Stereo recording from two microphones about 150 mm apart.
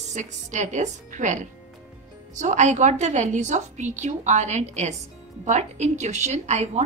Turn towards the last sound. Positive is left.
turn(degrees=-50)  # may be behind; listen again after turning